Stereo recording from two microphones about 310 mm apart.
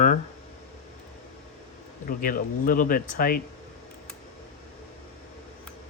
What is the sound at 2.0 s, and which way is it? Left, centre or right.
Speech, left.